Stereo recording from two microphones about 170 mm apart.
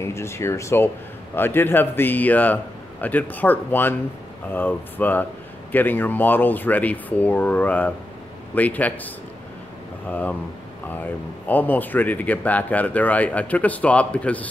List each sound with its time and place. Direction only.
0.0 s speech: 15° left (ahead or behind)